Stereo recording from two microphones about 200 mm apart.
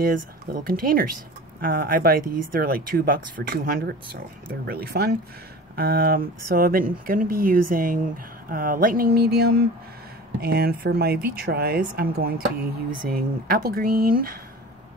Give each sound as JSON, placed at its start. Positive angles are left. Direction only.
{"t": 0.0, "sound": "speech", "side_deg": -45}